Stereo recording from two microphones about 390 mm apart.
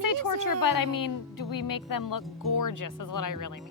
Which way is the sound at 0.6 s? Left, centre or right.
Left.